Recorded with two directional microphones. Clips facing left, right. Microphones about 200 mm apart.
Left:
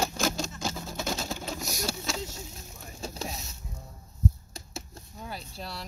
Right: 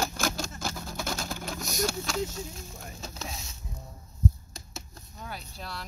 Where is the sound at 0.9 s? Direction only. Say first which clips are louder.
Left 1 dB; 20° left (ahead or behind).